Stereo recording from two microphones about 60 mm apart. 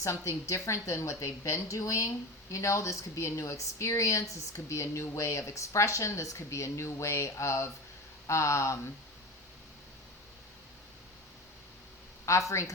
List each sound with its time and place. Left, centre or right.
0.0 s a woman's voice: left
12.2 s speech: left